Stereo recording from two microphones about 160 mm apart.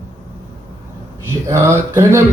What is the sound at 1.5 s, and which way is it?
Speech, 15° right (ahead or behind).